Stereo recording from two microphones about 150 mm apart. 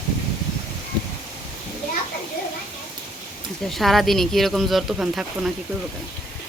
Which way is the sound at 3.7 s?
Centre (ahead or behind).